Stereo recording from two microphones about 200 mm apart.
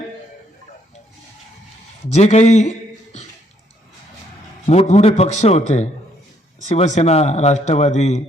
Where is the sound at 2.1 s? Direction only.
35° left (ahead or behind).